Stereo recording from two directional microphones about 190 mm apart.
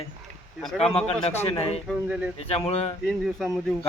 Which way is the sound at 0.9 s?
30° left (ahead or behind).